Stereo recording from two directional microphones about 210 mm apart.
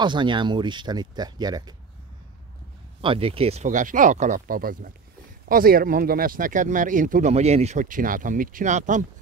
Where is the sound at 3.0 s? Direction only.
25° right (ahead or behind).